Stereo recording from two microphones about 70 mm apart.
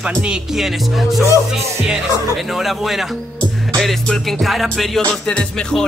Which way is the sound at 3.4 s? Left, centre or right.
Centre.